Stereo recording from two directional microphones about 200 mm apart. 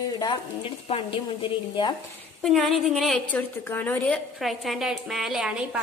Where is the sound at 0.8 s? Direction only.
25° left (ahead or behind).